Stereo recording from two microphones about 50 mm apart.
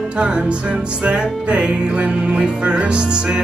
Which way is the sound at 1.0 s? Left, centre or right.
Right.